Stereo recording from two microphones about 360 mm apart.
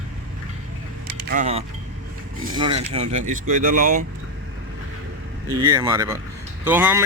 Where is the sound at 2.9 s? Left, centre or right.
Centre.